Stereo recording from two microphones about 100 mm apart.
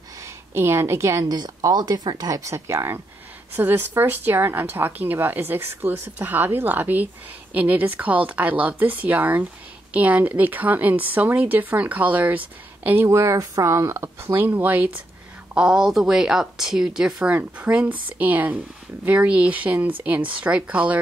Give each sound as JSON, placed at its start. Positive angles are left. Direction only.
{"t": 0.2, "sound": "a woman's voice", "side_deg": -25}
{"t": 15.5, "sound": "a woman's voice", "side_deg": -5}